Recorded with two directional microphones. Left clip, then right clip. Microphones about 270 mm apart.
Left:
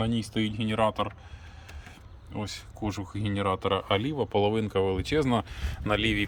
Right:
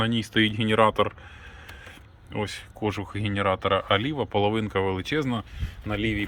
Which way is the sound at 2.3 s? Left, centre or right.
Centre.